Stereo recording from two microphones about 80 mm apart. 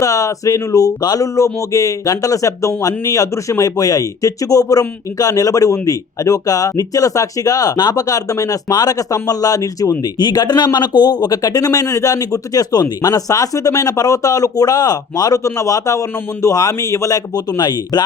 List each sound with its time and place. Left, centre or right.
0.0 s speech: left
10.0 s speech: left